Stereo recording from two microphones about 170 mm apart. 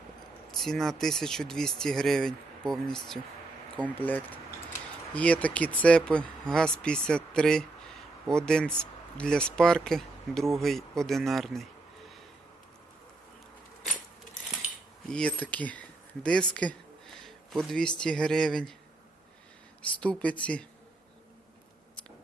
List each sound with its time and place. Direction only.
0.5 s speech: centre (ahead or behind)
15.1 s a sound: 5° left (ahead or behind)
17.7 s speech: 5° left (ahead or behind)
20.0 s speech: 5° left (ahead or behind)